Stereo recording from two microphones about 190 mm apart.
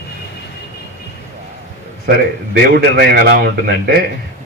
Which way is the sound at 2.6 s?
55° right (ahead or behind).